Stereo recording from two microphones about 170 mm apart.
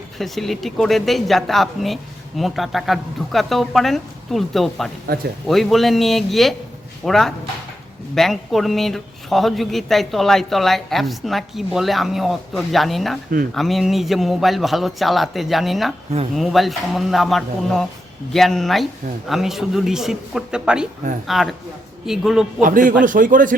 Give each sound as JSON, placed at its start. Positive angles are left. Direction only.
{"t": 0.2, "sound": "speech", "side_deg": 0}
{"t": 5.0, "sound": "speech", "side_deg": -60}
{"t": 5.5, "sound": "speech", "side_deg": 0}
{"t": 22.6, "sound": "speech", "side_deg": -50}